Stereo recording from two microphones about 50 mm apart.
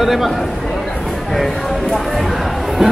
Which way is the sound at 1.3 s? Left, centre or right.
Centre.